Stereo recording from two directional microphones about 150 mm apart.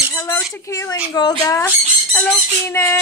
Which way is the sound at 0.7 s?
20° left (ahead or behind).